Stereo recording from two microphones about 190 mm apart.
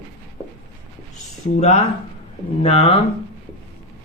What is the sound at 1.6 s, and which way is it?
Speech, 35° left (ahead or behind).